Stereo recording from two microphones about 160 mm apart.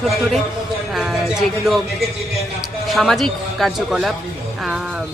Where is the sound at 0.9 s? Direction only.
Centre (ahead or behind).